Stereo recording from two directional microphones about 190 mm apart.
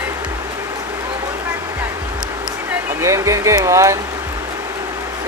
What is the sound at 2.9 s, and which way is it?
Speech, 15° right (ahead or behind).